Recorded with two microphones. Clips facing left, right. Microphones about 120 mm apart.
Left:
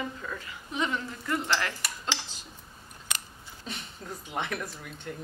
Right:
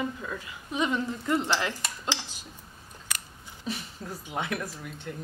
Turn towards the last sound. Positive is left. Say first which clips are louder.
# right 1 dB
turn(degrees=-5)  # may be behind; listen again after turning